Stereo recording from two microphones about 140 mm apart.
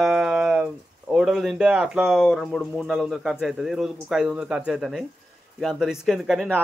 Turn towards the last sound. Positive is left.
turn(degrees=-5)  # may be behind; listen again after turning